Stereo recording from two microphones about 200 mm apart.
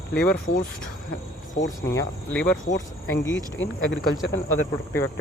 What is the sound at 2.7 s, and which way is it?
Speech, 65° left (ahead or behind).